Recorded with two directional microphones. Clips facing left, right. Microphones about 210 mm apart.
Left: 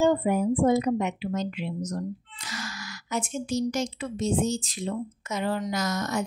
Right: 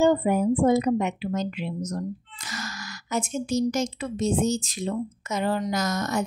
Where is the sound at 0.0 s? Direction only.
40° right (ahead or behind).